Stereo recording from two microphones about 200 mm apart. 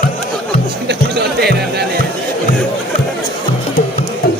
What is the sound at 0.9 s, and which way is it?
Music, 55° right (ahead or behind).